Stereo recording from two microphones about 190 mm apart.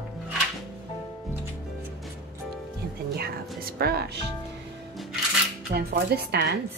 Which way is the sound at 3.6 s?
55° right (ahead or behind).